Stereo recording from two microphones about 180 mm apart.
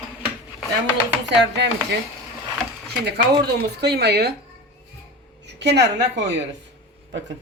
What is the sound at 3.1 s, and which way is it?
Speech, 65° right (ahead or behind).